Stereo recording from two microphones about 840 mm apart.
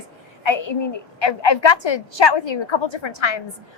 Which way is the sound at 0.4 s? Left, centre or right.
Left.